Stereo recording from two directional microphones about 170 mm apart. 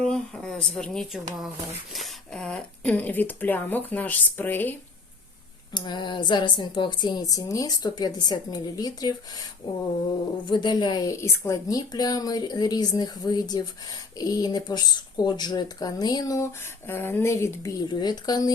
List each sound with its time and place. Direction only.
0.0 s speech: 5° left (ahead or behind)
5.7 s speech: 25° left (ahead or behind)